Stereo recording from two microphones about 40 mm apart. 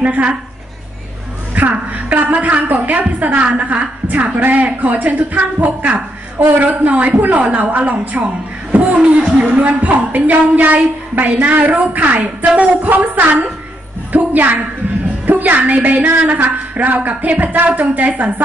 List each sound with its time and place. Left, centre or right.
0.0 s a woman's voice: right
1.5 s a woman's voice: right